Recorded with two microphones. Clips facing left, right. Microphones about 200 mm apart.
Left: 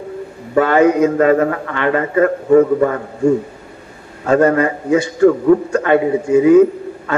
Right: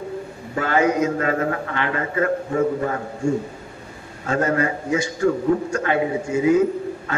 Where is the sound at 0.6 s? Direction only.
60° left (ahead or behind).